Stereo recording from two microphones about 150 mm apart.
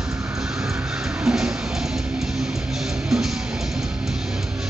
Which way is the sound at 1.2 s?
5° right (ahead or behind).